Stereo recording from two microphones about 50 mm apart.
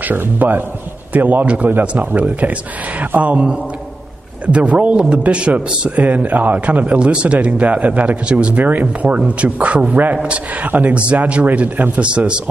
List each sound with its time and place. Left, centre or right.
0.0 s a man's voice: right
4.5 s speech: right
10.7 s a man's voice: right
11.0 s speech: right